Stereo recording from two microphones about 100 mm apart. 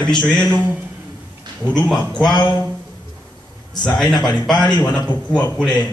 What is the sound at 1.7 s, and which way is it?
Speech, 10° left (ahead or behind).